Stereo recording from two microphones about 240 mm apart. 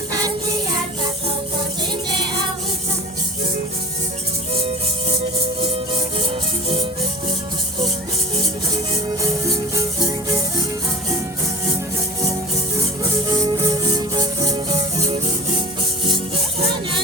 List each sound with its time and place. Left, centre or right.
0.1 s music: centre
9.7 s music: centre
13.1 s music: centre